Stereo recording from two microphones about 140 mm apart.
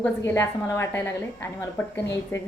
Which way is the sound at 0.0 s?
15° left (ahead or behind).